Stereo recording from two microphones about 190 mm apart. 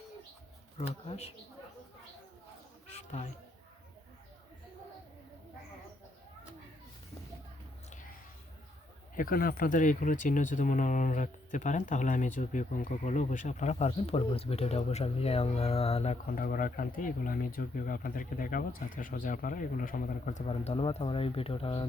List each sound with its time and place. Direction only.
0.8 s speech: 35° left (ahead or behind)
2.8 s a sound: 35° left (ahead or behind)
9.1 s speech: 50° left (ahead or behind); by 16.1 s 30° left (ahead or behind)
16.3 s speech: 50° left (ahead or behind); by 21.8 s 30° left (ahead or behind)